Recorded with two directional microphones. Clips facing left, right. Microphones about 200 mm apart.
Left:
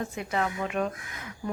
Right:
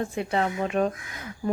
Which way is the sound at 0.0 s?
30° right (ahead or behind).